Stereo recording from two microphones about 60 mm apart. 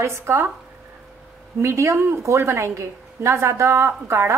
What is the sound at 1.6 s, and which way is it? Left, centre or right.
A woman's voice, right.